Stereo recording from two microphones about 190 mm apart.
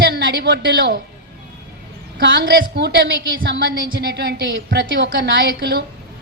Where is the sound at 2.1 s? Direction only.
50° right (ahead or behind).